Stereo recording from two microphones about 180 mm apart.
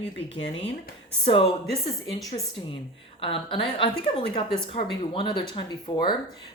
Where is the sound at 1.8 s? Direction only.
20° left (ahead or behind).